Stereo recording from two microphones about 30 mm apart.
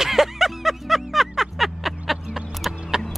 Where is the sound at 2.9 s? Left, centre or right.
Right.